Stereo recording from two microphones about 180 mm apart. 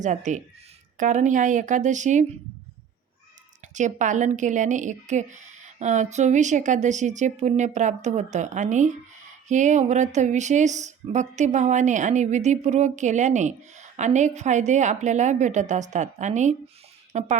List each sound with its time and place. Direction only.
0.0 s speech: 45° right (ahead or behind)
3.8 s speech: 45° right (ahead or behind)